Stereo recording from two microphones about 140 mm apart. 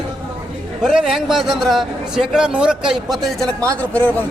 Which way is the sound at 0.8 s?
5° right (ahead or behind).